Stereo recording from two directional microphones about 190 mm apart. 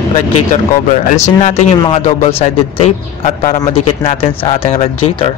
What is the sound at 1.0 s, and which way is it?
Speech, 40° left (ahead or behind).